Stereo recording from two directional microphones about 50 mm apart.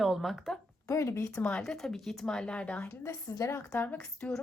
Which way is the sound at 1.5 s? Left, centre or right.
Centre.